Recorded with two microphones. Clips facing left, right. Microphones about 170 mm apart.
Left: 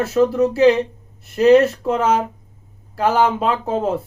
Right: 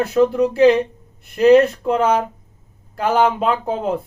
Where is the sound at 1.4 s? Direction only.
Centre (ahead or behind).